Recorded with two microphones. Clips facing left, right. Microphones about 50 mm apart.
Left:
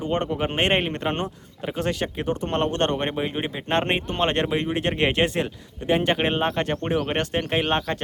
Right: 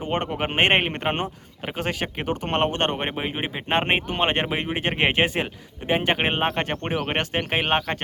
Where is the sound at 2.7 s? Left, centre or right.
Right.